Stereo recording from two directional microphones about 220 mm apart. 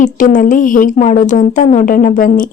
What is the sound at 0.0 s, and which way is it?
A woman's voice, 35° left (ahead or behind).